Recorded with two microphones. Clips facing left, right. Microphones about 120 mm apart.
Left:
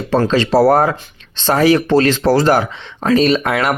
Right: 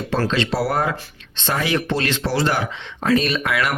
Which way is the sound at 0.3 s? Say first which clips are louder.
Left 10 dB; 40° left (ahead or behind).